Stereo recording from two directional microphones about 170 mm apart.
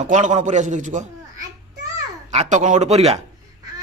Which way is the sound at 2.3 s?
45° right (ahead or behind).